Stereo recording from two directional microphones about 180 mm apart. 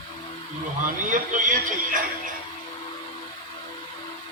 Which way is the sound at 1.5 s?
45° right (ahead or behind).